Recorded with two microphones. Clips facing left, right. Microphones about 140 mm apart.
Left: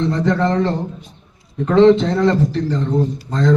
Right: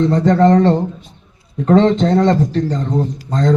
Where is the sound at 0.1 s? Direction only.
40° right (ahead or behind).